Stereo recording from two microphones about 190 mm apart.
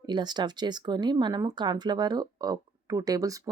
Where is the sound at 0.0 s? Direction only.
25° right (ahead or behind).